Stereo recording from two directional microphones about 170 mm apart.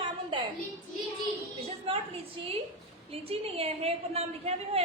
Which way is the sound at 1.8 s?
35° right (ahead or behind).